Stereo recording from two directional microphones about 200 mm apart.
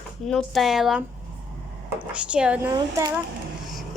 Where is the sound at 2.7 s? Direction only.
20° right (ahead or behind).